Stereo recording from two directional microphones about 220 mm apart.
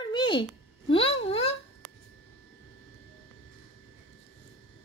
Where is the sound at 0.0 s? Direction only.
20° left (ahead or behind).